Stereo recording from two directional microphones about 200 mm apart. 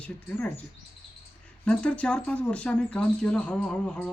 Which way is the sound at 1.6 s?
5° left (ahead or behind).